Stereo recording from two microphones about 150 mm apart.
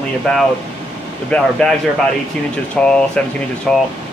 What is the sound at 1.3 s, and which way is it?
Speech, 5° left (ahead or behind).